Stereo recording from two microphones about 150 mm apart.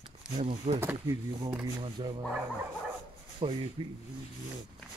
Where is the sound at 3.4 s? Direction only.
35° right (ahead or behind).